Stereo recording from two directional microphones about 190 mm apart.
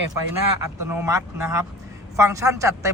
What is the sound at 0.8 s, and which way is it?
Speech, 15° right (ahead or behind).